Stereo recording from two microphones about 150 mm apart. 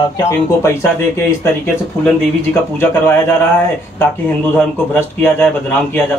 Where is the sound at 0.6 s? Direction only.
20° left (ahead or behind).